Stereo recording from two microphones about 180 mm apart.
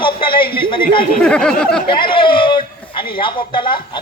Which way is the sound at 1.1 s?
5° left (ahead or behind).